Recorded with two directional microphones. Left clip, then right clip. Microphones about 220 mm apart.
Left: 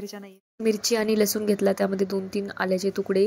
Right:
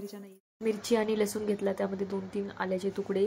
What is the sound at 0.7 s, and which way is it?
Speech, 20° left (ahead or behind).